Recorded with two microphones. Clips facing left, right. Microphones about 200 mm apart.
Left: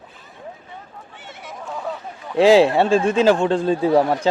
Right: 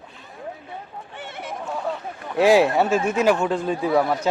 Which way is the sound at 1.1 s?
60° right (ahead or behind).